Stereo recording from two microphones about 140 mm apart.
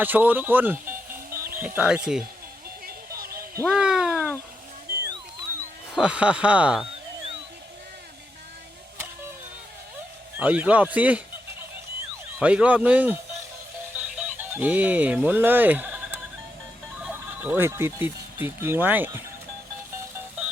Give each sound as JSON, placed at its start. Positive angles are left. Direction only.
{"t": 0.0, "sound": "speech", "side_deg": -10}
{"t": 3.2, "sound": "a sound", "side_deg": -90}
{"t": 3.7, "sound": "a sound", "side_deg": -5}
{"t": 5.0, "sound": "a sound", "side_deg": -30}
{"t": 5.9, "sound": "speech", "side_deg": -5}
{"t": 10.3, "sound": "speech", "side_deg": -10}
{"t": 12.4, "sound": "speech", "side_deg": -10}
{"t": 13.9, "sound": "music", "side_deg": -10}
{"t": 17.0, "sound": "speech", "side_deg": -15}